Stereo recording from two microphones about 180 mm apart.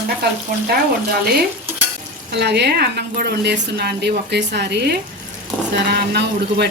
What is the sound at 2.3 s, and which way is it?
Speech, 70° right (ahead or behind).